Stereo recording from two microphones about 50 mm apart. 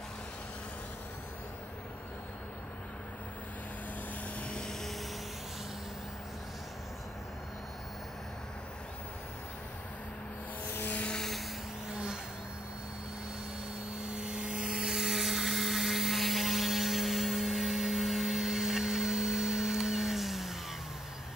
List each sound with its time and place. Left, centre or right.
4.4 s vehicle: centre
11.1 s vehicle: centre
11.9 s vehicle: centre
14.1 s helicopter: centre